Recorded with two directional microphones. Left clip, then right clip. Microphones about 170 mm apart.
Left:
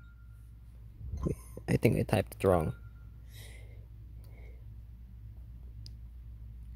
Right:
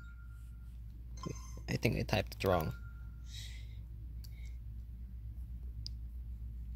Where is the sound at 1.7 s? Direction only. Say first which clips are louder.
Left 6 dB; 45° left (ahead or behind).